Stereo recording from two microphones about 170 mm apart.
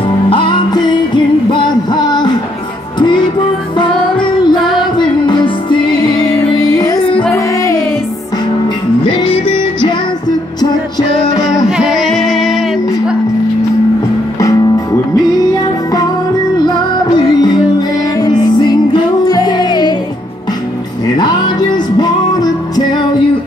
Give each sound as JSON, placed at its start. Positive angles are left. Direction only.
{"t": 0.3, "sound": "music", "side_deg": 30}
{"t": 9.2, "sound": "music", "side_deg": 30}
{"t": 11.7, "sound": "music", "side_deg": 0}
{"t": 14.4, "sound": "music", "side_deg": 20}
{"t": 16.5, "sound": "music", "side_deg": 25}
{"t": 18.2, "sound": "music", "side_deg": 25}
{"t": 21.2, "sound": "music", "side_deg": 25}